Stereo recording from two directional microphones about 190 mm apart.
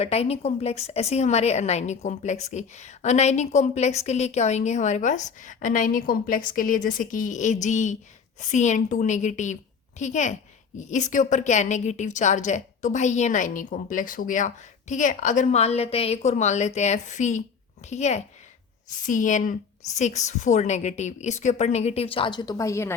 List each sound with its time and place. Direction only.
0.0 s a woman's voice: 35° left (ahead or behind); by 23.0 s 15° left (ahead or behind)